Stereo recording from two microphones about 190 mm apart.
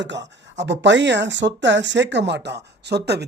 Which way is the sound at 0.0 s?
65° right (ahead or behind).